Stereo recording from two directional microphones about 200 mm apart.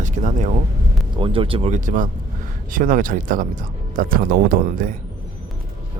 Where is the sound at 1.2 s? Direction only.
25° right (ahead or behind); by 4.9 s 45° right (ahead or behind).